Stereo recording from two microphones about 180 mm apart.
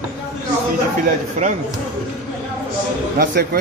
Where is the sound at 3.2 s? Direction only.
65° right (ahead or behind).